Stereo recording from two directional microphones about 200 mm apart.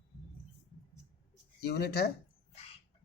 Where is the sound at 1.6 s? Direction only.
55° left (ahead or behind).